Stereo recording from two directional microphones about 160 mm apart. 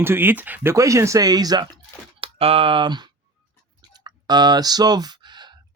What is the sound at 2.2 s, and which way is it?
Speech, 35° right (ahead or behind).